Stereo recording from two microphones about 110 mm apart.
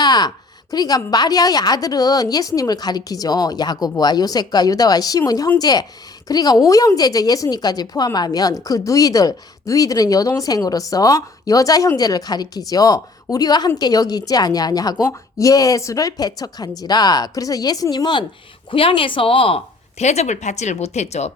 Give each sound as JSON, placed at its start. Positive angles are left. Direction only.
{"t": 0.0, "sound": "a woman's voice", "side_deg": 40}
{"t": 18.7, "sound": "speech", "side_deg": 55}